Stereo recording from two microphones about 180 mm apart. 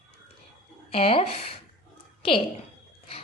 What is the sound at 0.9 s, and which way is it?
A woman's voice, 30° left (ahead or behind).